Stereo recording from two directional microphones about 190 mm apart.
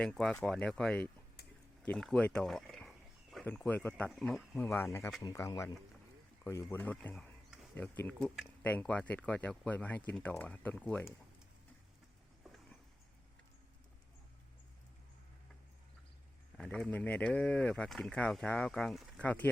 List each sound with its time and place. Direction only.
0.0 s speech: 5° left (ahead or behind)
12.4 s a sound: centre (ahead or behind)
16.6 s speech: 5° left (ahead or behind)